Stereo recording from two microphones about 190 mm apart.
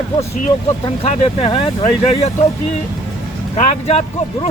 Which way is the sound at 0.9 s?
30° left (ahead or behind).